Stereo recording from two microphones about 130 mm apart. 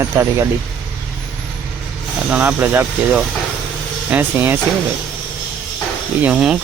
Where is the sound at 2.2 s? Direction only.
15° right (ahead or behind).